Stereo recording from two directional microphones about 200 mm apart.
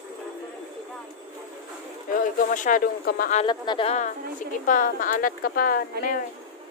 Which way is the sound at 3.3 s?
25° left (ahead or behind).